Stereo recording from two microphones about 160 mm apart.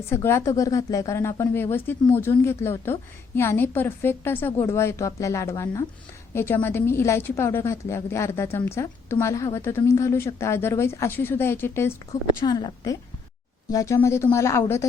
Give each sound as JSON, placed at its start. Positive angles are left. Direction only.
{"t": 0.1, "sound": "a woman's voice", "side_deg": 15}
{"t": 12.5, "sound": "a woman's voice", "side_deg": 25}